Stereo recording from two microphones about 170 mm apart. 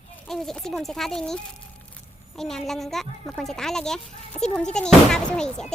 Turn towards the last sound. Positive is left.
turn(degrees=5)  # may be behind; listen again after turning